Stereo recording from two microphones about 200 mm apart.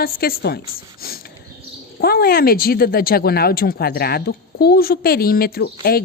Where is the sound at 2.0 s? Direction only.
50° left (ahead or behind).